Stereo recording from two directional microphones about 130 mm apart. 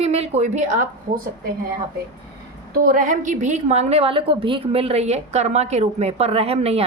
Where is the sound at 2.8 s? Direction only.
90° right.